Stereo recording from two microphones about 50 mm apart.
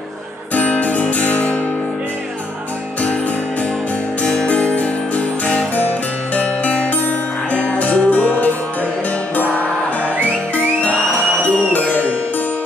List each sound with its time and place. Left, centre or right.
0.6 s guitar: left
1.1 s music: left
4.2 s music: left
10.2 s music: left